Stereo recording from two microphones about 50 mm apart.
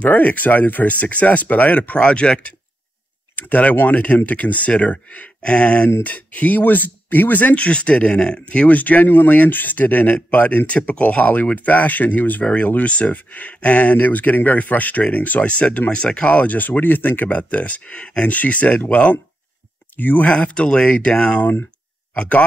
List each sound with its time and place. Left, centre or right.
0.0 s speech: left
3.3 s speech: left
20.2 s speech: left